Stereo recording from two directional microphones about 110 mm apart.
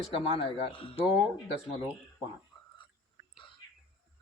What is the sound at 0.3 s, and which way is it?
Speech, 55° left (ahead or behind).